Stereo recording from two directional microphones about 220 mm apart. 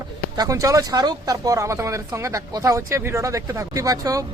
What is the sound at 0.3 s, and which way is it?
Speech, 15° right (ahead or behind).